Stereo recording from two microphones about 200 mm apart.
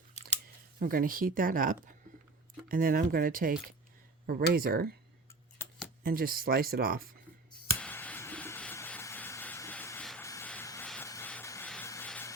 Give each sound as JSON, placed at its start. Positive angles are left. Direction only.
{"t": 0.8, "sound": "speech", "side_deg": -45}
{"t": 6.0, "sound": "speech", "side_deg": -45}
{"t": 7.8, "sound": "a sound", "side_deg": 5}